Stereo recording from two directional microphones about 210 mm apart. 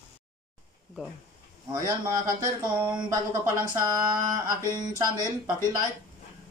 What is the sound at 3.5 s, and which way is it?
Speech, 15° right (ahead or behind).